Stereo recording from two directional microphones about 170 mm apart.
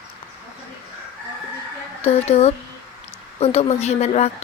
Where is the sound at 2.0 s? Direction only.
35° left (ahead or behind).